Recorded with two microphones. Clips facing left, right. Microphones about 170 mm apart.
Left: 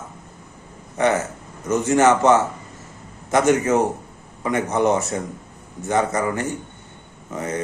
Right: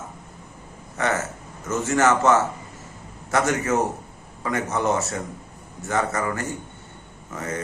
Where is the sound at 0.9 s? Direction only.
15° left (ahead or behind).